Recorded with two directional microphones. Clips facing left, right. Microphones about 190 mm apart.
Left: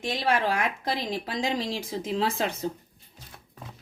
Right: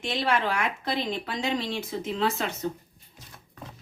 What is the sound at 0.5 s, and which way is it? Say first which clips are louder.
Speech: even; 35° left (ahead or behind).